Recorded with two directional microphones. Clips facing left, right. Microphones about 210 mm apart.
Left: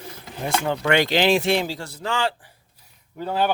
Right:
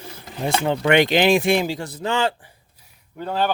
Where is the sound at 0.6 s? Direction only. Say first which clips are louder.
Right 4 dB; 20° right (ahead or behind).